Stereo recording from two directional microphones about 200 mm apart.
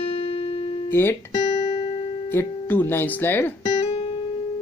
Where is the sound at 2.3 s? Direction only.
10° left (ahead or behind).